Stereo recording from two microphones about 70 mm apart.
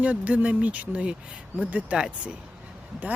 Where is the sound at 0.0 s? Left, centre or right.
Right.